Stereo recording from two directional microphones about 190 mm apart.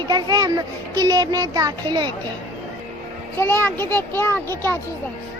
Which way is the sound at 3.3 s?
10° left (ahead or behind).